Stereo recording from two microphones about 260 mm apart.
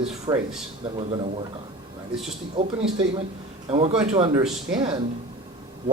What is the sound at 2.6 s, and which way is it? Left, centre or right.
A man's voice, centre.